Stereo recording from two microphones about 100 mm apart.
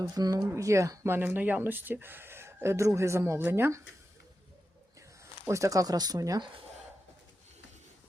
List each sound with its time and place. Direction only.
0.0 s speech: 40° right (ahead or behind); by 3.8 s 25° right (ahead or behind)
4.9 s speech: 30° right (ahead or behind)